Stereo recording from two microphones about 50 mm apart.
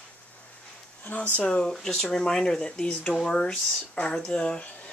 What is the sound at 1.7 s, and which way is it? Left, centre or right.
Speech, centre.